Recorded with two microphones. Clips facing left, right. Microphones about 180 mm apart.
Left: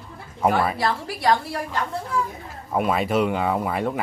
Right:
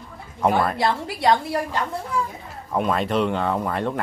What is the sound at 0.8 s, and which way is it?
Speech, 20° right (ahead or behind).